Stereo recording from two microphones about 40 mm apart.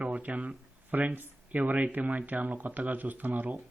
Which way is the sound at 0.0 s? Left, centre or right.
Right.